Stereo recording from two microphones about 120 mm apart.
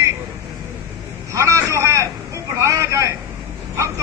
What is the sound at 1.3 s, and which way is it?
Vehicle, 25° right (ahead or behind).